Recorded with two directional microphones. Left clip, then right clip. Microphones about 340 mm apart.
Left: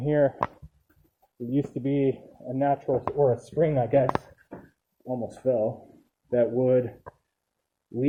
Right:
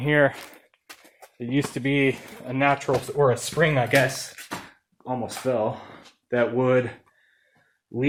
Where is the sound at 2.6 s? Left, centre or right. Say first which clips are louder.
Right 3 dB; right.